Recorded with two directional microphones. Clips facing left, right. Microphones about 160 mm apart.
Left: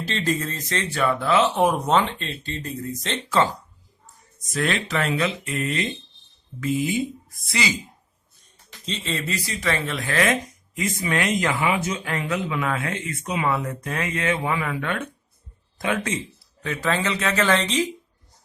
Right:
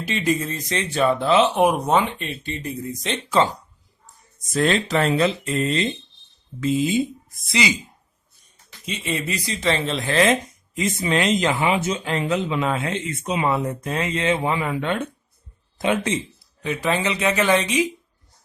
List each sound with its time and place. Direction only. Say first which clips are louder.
0.0 s speech: right 2 dB; 15° right (ahead or behind)
4.5 s speech: right 5 dB; 30° right (ahead or behind)
8.9 s speech: right 2 dB; 15° right (ahead or behind)